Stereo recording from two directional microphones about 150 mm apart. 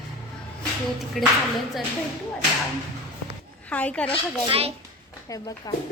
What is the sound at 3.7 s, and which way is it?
Speech, 10° left (ahead or behind).